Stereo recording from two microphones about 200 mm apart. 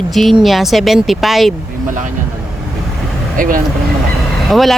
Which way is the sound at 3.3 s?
45° right (ahead or behind).